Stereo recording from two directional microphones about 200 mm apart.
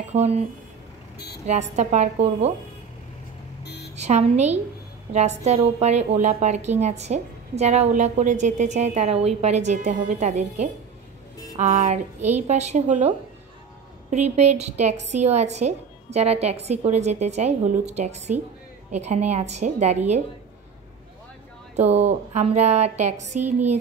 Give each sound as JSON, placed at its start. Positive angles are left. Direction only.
{"t": 0.1, "sound": "a woman's voice", "side_deg": -30}
{"t": 1.4, "sound": "a woman's voice", "side_deg": -35}
{"t": 3.6, "sound": "music", "side_deg": 55}
{"t": 3.9, "sound": "a woman's voice", "side_deg": -35}
{"t": 14.1, "sound": "a woman's voice", "side_deg": -35}
{"t": 21.7, "sound": "a woman's voice", "side_deg": -35}